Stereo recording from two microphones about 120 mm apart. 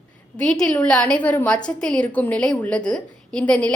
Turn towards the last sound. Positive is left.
turn(degrees=10)  # may be behind; listen again after turning